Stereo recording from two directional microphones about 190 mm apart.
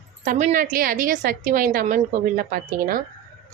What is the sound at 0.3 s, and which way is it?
Speech, 40° right (ahead or behind).